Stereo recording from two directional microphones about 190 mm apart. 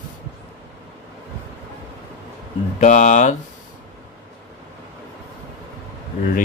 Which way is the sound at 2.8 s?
40° left (ahead or behind).